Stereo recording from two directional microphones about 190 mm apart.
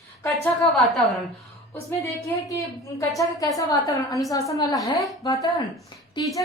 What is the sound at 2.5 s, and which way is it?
A woman's voice, 15° left (ahead or behind).